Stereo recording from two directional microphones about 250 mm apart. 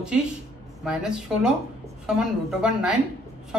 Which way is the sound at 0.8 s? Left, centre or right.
Centre.